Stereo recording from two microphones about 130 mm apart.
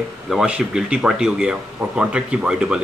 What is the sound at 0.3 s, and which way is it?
Speech, 5° right (ahead or behind).